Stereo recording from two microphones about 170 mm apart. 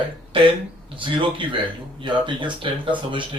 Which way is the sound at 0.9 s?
30° right (ahead or behind).